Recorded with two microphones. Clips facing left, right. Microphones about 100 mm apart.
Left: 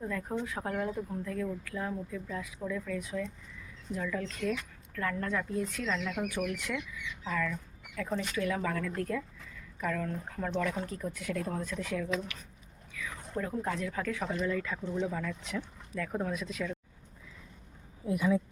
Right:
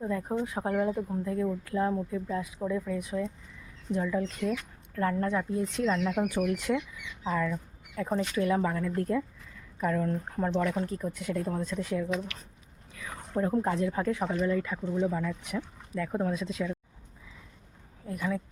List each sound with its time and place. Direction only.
0.0 s speech: 20° right (ahead or behind)
13.0 s a sound: 30° right (ahead or behind)
13.6 s speech: 25° right (ahead or behind)
14.9 s speech: 15° right (ahead or behind)
18.0 s speech: 5° left (ahead or behind)